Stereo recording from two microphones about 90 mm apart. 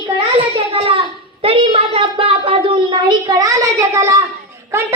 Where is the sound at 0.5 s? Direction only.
75° right (ahead or behind).